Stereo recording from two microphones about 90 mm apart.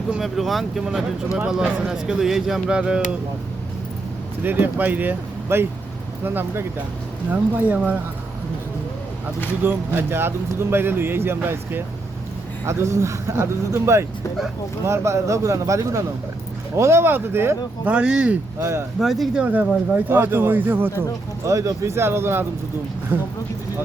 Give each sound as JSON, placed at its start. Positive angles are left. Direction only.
{"t": 0.1, "sound": "speech", "side_deg": 0}
{"t": 4.4, "sound": "speech", "side_deg": -20}
{"t": 9.6, "sound": "speech", "side_deg": -25}
{"t": 17.9, "sound": "speech", "side_deg": -10}
{"t": 18.6, "sound": "speech", "side_deg": -30}
{"t": 18.9, "sound": "speech", "side_deg": 0}
{"t": 19.4, "sound": "speech", "side_deg": -15}
{"t": 21.4, "sound": "speech", "side_deg": -35}